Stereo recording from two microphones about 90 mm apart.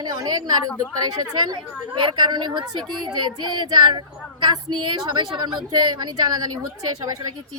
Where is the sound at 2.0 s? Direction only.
60° right (ahead or behind).